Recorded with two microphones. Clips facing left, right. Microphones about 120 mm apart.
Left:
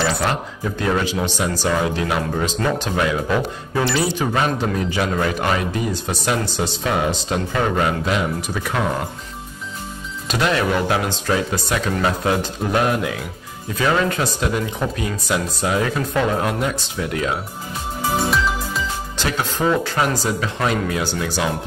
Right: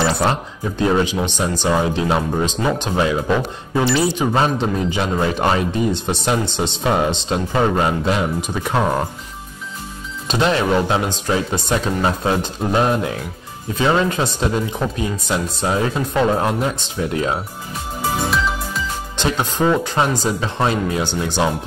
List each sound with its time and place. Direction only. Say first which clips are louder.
0.2 s speech: right 2 dB; 25° right (ahead or behind)
10.2 s speech: right 2 dB; 25° right (ahead or behind)
19.1 s speech: right 4 dB; 20° right (ahead or behind)